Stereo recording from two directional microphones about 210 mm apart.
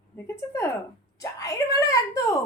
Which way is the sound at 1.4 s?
15° left (ahead or behind).